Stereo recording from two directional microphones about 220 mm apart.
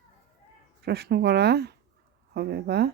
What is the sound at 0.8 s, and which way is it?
Speech, 45° right (ahead or behind).